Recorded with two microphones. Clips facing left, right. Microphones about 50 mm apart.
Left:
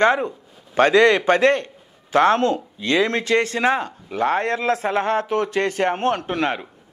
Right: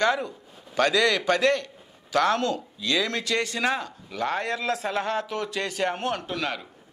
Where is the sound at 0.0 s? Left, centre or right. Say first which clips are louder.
Left 6 dB; left.